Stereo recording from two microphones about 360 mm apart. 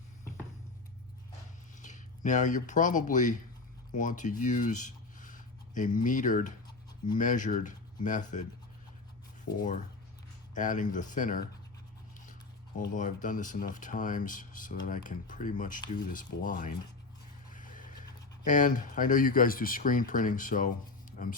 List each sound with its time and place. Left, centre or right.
1.8 s speech: left
9.6 s speech: left
12.9 s speech: left
17.5 s vehicle: left
18.4 s speech: left